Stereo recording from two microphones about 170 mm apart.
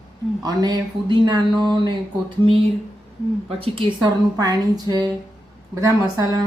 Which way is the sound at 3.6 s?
30° right (ahead or behind).